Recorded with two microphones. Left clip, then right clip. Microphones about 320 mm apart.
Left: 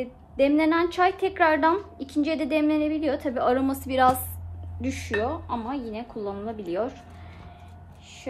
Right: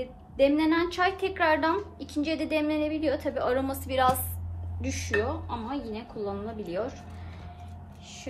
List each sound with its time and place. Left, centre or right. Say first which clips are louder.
0.4 s a woman's voice: left 2 dB; left